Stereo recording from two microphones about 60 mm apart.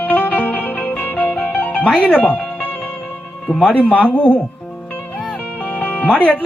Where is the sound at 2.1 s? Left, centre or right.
Left.